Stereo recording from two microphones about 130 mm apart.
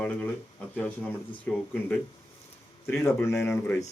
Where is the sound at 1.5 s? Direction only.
5° left (ahead or behind).